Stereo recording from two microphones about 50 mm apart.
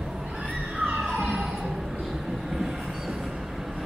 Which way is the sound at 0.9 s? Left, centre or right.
Centre.